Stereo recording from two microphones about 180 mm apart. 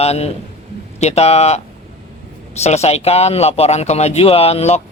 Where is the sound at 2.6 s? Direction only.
35° left (ahead or behind).